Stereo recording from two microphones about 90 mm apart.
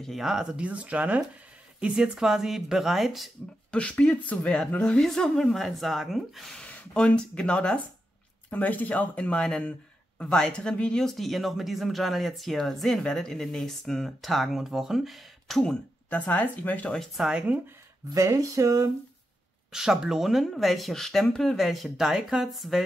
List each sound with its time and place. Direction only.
0.0 s speech: centre (ahead or behind)
3.7 s speech: 10° left (ahead or behind)
6.6 s speech: 10° left (ahead or behind)
16.1 s speech: 15° left (ahead or behind)
17.0 s speech: 5° right (ahead or behind)
18.1 s speech: 35° right (ahead or behind)
19.7 s speech: 5° right (ahead or behind)